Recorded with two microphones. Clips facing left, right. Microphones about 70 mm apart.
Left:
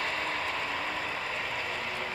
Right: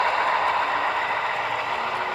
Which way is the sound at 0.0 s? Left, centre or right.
Right.